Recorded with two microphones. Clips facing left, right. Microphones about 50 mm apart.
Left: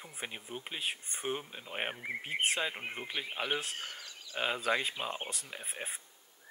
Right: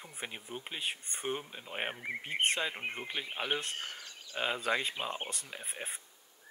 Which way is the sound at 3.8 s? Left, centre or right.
Right.